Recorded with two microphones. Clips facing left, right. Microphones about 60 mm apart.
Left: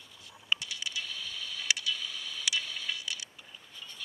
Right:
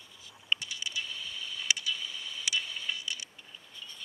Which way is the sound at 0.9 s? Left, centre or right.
Left.